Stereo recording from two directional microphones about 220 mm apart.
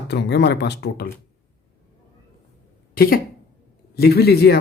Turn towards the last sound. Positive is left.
turn(degrees=45)  # may be behind; listen again after turning